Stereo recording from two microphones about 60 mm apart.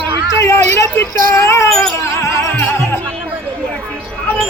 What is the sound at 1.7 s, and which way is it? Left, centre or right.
Music, centre.